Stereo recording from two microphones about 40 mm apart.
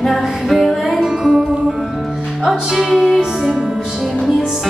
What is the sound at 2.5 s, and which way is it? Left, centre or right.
Music, centre.